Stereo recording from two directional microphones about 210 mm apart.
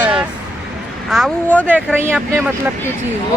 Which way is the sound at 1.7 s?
10° right (ahead or behind).